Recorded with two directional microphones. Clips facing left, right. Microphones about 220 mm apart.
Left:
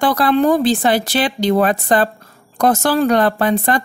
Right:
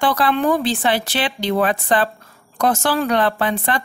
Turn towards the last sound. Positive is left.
turn(degrees=40)  # may be behind; listen again after turning